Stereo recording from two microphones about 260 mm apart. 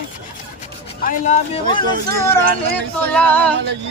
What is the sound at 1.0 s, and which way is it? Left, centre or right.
Speech, left.